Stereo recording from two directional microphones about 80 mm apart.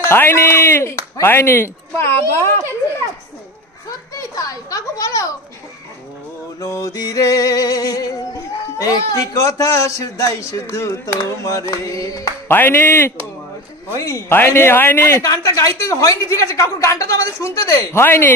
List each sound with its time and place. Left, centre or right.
0.1 s speech: left
4.1 s a woman's voice: left
6.6 s speech: left
12.4 s a man's voice: left
13.9 s speech: left
14.3 s a man's voice: left
15.2 s speech: left